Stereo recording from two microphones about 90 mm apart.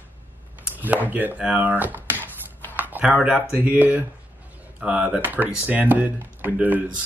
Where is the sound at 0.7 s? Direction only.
20° right (ahead or behind).